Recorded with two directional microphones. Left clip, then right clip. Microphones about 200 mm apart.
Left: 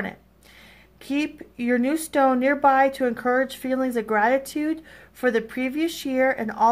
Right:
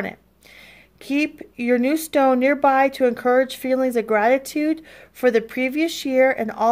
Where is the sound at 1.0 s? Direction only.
40° right (ahead or behind).